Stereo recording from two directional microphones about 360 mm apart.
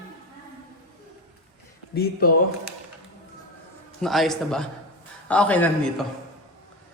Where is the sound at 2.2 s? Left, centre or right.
Left.